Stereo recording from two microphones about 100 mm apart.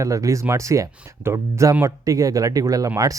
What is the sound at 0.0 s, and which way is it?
Speech, 30° right (ahead or behind).